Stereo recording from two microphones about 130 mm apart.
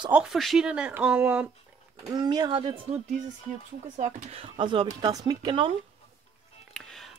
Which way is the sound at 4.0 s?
65° right (ahead or behind).